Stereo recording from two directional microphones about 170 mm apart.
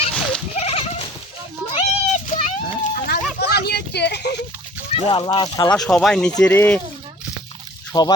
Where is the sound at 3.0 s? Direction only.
70° left (ahead or behind).